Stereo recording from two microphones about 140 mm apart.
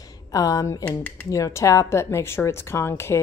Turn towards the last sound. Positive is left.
turn(degrees=20)  # may be behind; listen again after turning